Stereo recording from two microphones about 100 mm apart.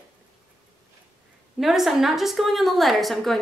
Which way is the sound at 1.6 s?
5° right (ahead or behind).